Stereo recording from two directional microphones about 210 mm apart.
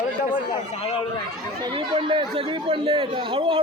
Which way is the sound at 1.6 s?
25° right (ahead or behind).